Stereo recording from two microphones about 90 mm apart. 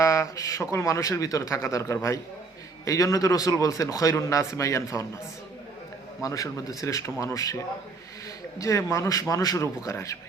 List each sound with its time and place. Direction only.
0.0 s speech: 35° left (ahead or behind)
6.2 s speech: 40° left (ahead or behind)
8.5 s speech: 35° left (ahead or behind)